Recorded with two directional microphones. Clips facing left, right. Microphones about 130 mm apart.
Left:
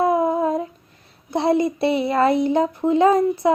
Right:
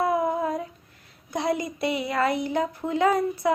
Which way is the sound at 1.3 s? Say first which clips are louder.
Left 8 dB; 25° left (ahead or behind).